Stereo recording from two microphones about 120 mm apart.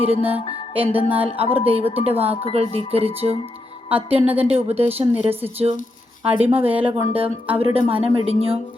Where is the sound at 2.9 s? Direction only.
60° right (ahead or behind).